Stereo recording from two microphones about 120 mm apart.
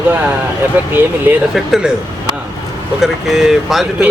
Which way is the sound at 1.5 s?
Centre (ahead or behind).